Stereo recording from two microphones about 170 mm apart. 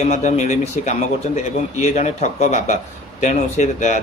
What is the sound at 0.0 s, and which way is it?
A man's voice, 45° left (ahead or behind).